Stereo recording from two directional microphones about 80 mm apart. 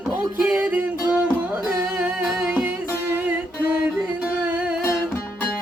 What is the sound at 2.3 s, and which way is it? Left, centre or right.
Music, centre.